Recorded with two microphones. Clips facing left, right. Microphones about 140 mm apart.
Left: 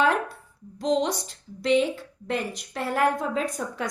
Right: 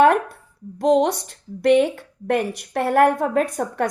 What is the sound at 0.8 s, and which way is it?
A woman's voice, 60° right (ahead or behind).